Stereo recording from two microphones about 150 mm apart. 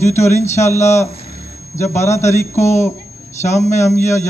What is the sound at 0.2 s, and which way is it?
Speech, 15° left (ahead or behind).